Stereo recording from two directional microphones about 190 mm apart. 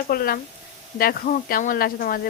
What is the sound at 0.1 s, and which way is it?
A woman's voice, 50° left (ahead or behind).